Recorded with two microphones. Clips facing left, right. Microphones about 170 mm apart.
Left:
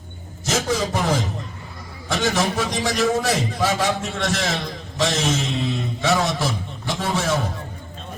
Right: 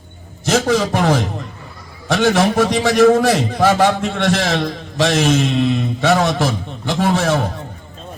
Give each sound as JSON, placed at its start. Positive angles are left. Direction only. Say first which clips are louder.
{"t": 0.4, "sound": "a man's voice", "louder": "right 7 dB", "side_deg": -65}